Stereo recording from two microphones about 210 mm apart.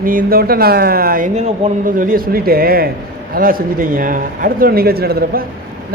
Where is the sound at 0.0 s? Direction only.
40° right (ahead or behind).